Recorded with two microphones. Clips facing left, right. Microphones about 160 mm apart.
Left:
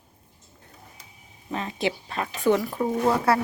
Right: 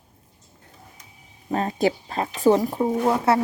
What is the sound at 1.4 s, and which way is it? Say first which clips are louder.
Speech: right 6 dB; 45° right (ahead or behind).